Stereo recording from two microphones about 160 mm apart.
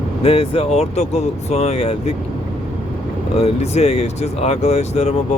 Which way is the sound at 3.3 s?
40° left (ahead or behind).